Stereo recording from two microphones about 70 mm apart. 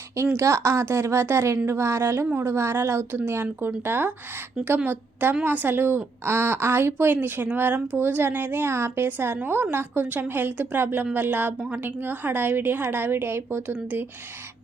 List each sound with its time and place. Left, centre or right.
0.3 s a woman's voice: right